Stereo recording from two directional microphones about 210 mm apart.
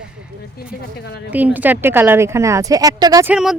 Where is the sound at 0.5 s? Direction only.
50° left (ahead or behind).